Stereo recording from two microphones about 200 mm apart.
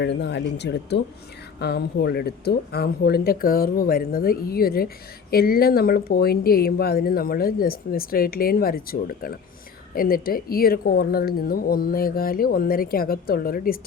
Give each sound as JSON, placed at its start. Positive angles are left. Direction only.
{"t": 0.0, "sound": "speech", "side_deg": 60}